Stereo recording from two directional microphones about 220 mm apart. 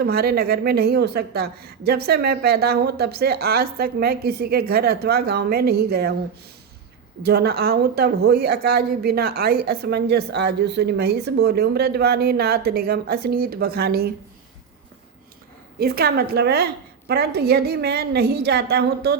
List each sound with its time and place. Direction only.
0.0 s speech: 45° right (ahead or behind)
7.2 s speech: 50° right (ahead or behind)
15.8 s speech: 45° right (ahead or behind)